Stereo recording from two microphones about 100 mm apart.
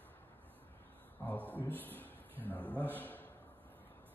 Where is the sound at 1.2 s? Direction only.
20° left (ahead or behind).